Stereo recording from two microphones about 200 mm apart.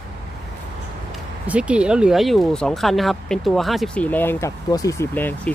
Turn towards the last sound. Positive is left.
turn(degrees=10)  # may be behind; listen again after turning